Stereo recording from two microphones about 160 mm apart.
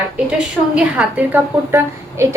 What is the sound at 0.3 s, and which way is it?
A woman's voice, 5° right (ahead or behind).